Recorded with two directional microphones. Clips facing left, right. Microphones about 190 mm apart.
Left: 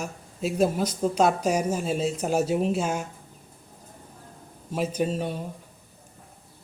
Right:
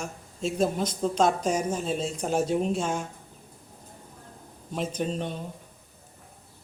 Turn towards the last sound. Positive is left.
turn(degrees=5)  # may be behind; listen again after turning